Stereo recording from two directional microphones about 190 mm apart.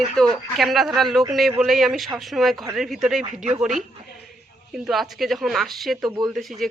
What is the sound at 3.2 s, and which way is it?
Speech, 40° right (ahead or behind).